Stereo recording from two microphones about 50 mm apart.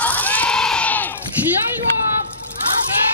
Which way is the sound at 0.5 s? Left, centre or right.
Centre.